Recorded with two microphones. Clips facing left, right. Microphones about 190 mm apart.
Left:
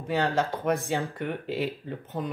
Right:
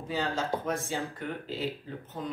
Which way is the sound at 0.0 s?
65° left (ahead or behind).